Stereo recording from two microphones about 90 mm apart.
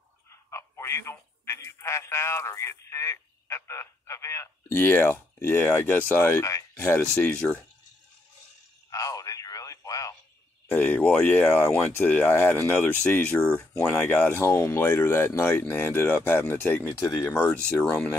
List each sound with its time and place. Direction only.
0.5 s a man's voice: 30° left (ahead or behind); by 7.6 s 15° left (ahead or behind)
8.9 s radio: 40° left (ahead or behind)
10.7 s speech: 20° left (ahead or behind)
14.4 s speech: 30° left (ahead or behind)
17.3 s speech: 10° left (ahead or behind)